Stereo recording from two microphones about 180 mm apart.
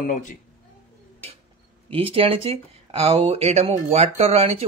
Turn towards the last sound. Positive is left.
turn(degrees=-35)  # may be behind; listen again after turning